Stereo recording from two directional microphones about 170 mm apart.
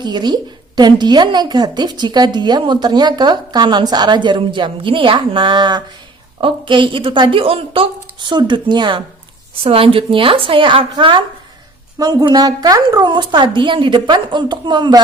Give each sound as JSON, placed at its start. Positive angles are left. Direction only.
{"t": 0.0, "sound": "a woman's voice", "side_deg": -25}